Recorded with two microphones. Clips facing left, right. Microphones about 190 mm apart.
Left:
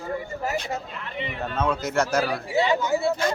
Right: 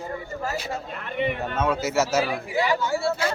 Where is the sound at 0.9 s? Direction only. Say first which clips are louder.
Right 6 dB; 50° right (ahead or behind).